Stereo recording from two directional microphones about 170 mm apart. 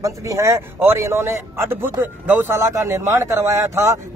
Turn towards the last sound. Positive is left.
turn(degrees=-15)  # may be behind; listen again after turning